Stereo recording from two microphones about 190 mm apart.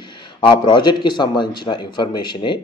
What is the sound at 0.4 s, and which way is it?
A man's voice, 25° left (ahead or behind).